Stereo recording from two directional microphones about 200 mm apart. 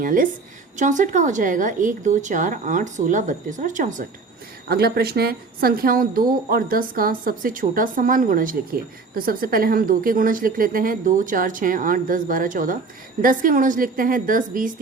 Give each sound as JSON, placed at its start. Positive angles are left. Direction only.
{"t": 0.0, "sound": "a woman's voice", "side_deg": -40}
{"t": 4.7, "sound": "a woman's voice", "side_deg": -50}